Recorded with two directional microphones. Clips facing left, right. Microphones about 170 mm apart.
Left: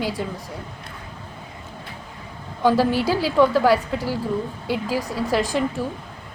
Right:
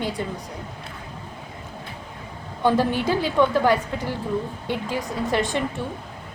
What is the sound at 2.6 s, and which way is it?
A woman's voice, 5° left (ahead or behind).